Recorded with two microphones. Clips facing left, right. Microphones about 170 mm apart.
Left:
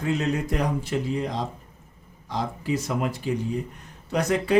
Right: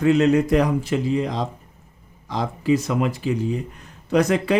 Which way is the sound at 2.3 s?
90° right.